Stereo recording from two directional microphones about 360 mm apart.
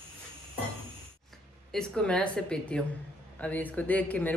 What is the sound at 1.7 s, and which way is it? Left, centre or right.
Speech, centre.